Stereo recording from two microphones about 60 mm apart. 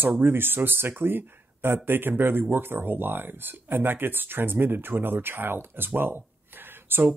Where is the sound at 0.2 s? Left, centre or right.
Right.